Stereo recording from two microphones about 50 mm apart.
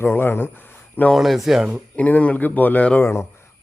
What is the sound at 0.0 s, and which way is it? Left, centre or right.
Speech, left.